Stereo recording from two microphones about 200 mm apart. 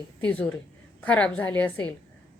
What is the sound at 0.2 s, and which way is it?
A woman's voice, 5° left (ahead or behind).